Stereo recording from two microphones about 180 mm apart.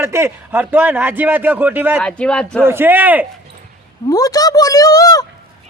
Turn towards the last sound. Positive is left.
turn(degrees=20)  # may be behind; listen again after turning